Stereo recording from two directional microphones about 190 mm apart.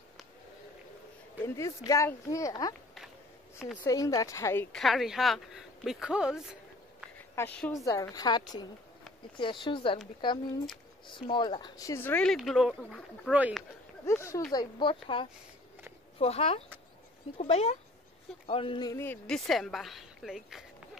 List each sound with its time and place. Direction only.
1.4 s speech: 15° left (ahead or behind)
3.8 s speech: 15° left (ahead or behind)
4.7 s speech: centre (ahead or behind)
7.3 s a woman's voice: 10° left (ahead or behind); by 9.9 s 25° left (ahead or behind)
11.1 s speech: 25° left (ahead or behind); by 13.7 s 5° right (ahead or behind)
14.0 s a woman's voice: 15° left (ahead or behind); by 20.6 s centre (ahead or behind)